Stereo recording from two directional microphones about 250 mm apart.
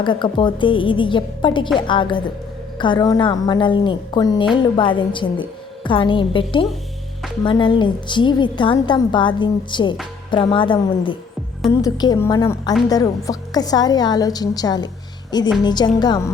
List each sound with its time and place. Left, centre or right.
0.0 s a woman's voice: centre